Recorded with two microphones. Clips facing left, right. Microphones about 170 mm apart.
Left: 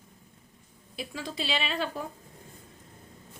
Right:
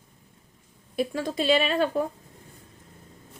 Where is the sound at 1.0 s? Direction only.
50° right (ahead or behind).